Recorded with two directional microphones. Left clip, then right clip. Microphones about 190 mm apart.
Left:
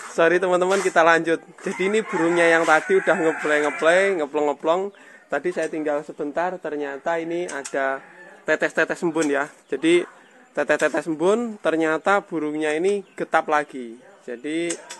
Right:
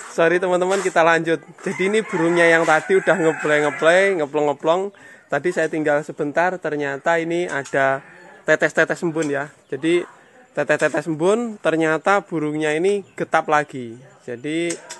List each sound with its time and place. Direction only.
0.1 s a man's voice: 5° right (ahead or behind); by 8.0 s 25° right (ahead or behind)
8.5 s a man's voice: 15° right (ahead or behind)
9.0 s speech: 5° left (ahead or behind)
10.5 s a man's voice: 5° right (ahead or behind)